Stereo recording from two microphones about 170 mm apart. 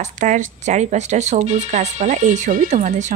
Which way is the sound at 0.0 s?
45° right (ahead or behind).